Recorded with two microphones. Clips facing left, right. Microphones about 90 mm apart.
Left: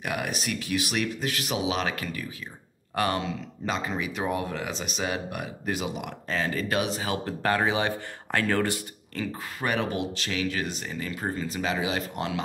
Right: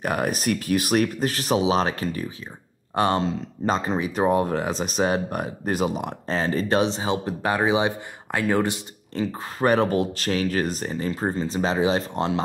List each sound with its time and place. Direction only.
0.0 s speech: 40° right (ahead or behind)